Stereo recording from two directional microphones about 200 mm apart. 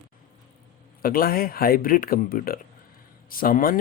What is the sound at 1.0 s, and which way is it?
Speech, 45° left (ahead or behind).